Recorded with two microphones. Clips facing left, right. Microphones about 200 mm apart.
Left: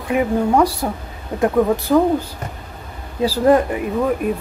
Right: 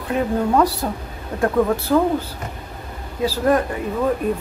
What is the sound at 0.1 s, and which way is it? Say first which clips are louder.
A woman's voice: left 2 dB; 10° left (ahead or behind).